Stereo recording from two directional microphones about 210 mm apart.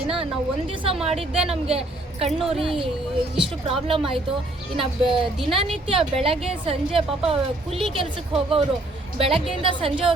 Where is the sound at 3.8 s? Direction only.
25° right (ahead or behind).